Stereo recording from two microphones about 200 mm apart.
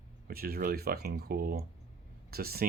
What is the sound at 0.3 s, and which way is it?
Speech, 50° right (ahead or behind).